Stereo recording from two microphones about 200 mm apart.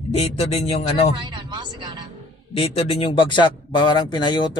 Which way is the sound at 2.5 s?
30° left (ahead or behind).